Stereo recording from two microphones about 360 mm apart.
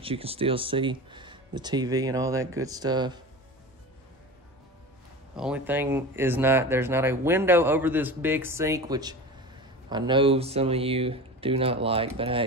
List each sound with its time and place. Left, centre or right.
0.0 s speech: centre
5.3 s speech: centre